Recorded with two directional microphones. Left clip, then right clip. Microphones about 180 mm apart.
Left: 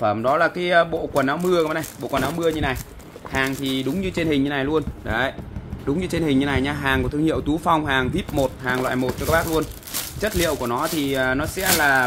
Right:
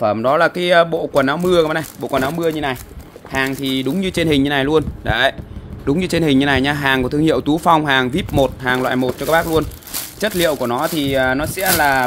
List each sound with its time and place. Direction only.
0.0 s speech: 50° right (ahead or behind)